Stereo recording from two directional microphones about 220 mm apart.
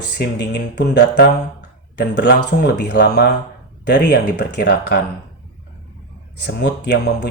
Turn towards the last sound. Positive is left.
turn(degrees=50)  # may be behind; listen again after turning